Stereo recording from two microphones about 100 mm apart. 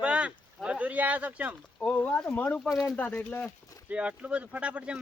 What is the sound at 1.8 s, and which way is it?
Speech, 15° left (ahead or behind).